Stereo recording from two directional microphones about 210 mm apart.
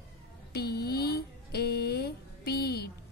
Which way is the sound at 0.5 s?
50° left (ahead or behind).